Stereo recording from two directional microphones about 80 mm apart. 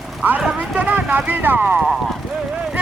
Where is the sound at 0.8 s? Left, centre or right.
Right.